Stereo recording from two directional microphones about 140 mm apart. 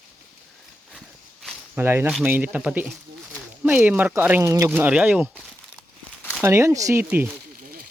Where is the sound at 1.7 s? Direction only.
15° right (ahead or behind).